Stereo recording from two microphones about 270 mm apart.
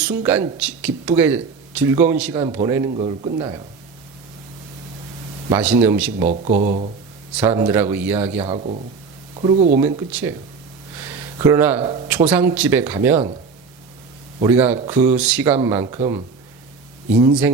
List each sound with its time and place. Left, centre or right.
0.0 s speech: centre
2.9 s speech: right
5.5 s speech: centre
6.2 s speech: right
7.3 s speech: centre
8.4 s speech: right
10.1 s speech: centre
10.9 s a sound: centre
12.3 s speech: centre
14.4 s speech: centre